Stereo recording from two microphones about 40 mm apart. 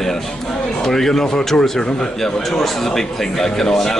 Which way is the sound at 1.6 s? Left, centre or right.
Left.